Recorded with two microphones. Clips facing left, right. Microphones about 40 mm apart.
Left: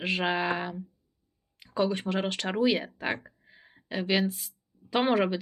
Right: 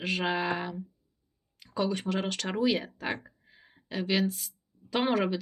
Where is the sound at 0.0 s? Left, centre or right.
Centre.